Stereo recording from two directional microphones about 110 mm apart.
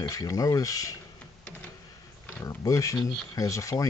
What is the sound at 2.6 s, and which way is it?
Speech, 30° left (ahead or behind).